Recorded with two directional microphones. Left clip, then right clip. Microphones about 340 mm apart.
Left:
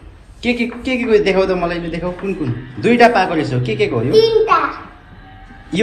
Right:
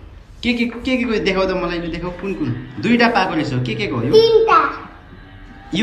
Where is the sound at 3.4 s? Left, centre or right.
Right.